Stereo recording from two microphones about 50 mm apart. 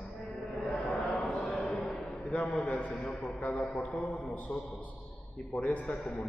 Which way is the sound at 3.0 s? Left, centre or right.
Centre.